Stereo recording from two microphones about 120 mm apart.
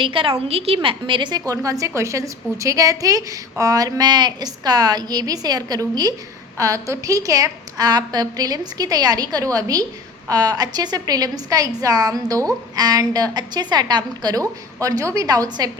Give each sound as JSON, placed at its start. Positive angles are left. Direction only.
{"t": 0.0, "sound": "a woman's voice", "side_deg": -45}